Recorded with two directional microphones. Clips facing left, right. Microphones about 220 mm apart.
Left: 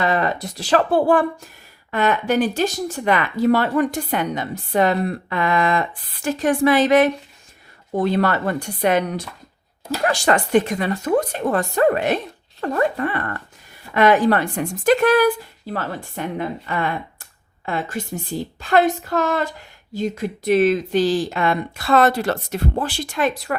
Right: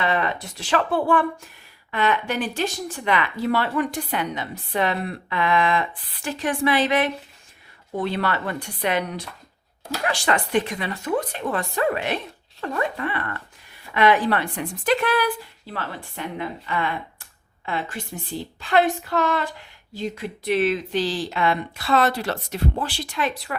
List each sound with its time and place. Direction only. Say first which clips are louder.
0.0 s speech: left 4 dB; 40° left (ahead or behind)